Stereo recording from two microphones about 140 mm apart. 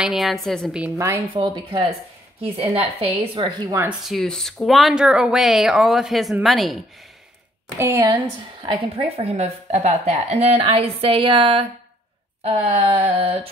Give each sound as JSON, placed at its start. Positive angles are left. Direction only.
{"t": 0.0, "sound": "speech", "side_deg": 0}
{"t": 0.8, "sound": "a woman's voice", "side_deg": -15}
{"t": 1.3, "sound": "a woman's voice", "side_deg": -35}
{"t": 2.5, "sound": "a woman's voice", "side_deg": -45}
{"t": 4.0, "sound": "speech", "side_deg": 0}
{"t": 7.8, "sound": "a woman's voice", "side_deg": -20}
{"t": 8.6, "sound": "a woman's voice", "side_deg": -45}